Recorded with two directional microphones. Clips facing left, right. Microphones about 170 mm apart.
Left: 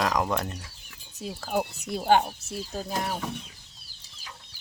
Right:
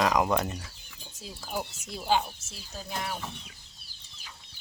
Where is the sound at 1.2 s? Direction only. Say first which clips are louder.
Left 7 dB; 60° left (ahead or behind); by 3.1 s 40° left (ahead or behind).